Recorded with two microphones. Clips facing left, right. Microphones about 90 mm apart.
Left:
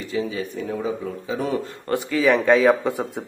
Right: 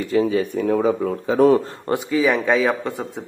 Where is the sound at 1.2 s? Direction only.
45° right (ahead or behind).